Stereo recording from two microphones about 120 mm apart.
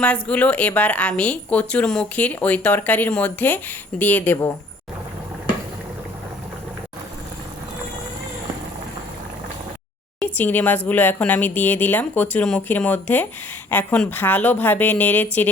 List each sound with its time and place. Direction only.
0.0 s speech: 10° left (ahead or behind)
10.3 s speech: 15° left (ahead or behind)